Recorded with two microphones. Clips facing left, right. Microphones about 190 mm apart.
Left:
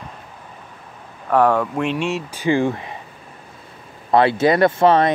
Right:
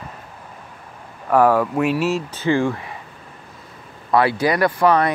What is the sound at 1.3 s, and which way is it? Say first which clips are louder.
Speech: right 1 dB; 5° right (ahead or behind).